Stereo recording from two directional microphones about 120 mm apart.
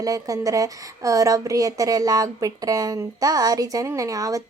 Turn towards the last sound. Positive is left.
turn(degrees=-30)  # may be behind; listen again after turning